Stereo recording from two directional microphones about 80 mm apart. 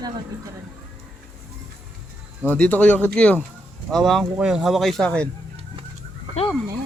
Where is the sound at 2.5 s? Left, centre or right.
Left.